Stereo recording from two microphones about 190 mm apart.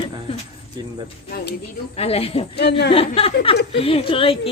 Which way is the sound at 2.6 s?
65° left (ahead or behind).